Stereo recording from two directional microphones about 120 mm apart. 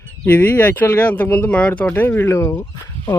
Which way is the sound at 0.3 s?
15° left (ahead or behind).